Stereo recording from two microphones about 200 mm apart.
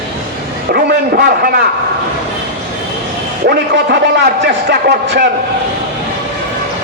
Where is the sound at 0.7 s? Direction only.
50° right (ahead or behind).